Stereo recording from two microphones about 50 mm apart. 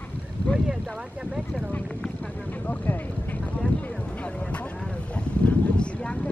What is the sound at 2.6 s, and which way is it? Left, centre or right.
Speech, left.